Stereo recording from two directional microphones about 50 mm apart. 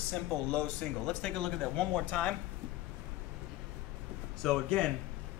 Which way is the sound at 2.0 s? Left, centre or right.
Left.